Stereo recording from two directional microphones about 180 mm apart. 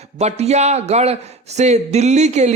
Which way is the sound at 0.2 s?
35° right (ahead or behind).